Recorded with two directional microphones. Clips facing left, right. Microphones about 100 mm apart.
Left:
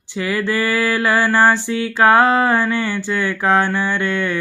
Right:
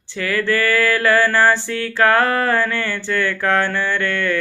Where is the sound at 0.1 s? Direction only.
15° left (ahead or behind).